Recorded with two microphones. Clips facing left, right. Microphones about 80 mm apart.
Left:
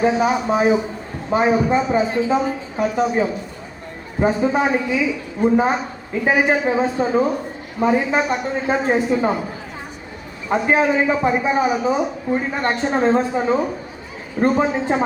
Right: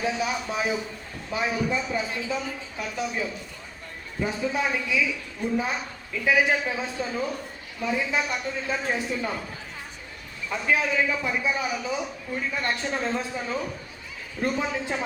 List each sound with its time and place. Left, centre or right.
0.0 s a man's voice: left
10.5 s a man's voice: left